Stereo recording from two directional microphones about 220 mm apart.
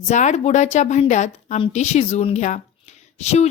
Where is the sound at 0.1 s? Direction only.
30° left (ahead or behind).